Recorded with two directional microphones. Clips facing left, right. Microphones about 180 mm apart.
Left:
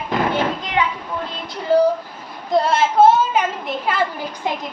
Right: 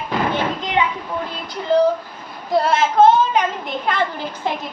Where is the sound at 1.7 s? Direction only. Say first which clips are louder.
Even; 10° left (ahead or behind).